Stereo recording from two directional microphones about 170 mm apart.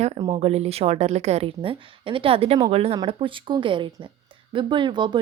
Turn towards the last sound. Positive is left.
turn(degrees=-25)  # may be behind; listen again after turning